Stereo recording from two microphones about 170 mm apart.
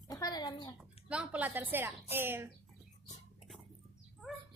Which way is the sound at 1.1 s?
5° right (ahead or behind).